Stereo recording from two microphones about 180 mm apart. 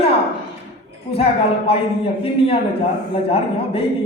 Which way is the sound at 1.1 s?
35° left (ahead or behind).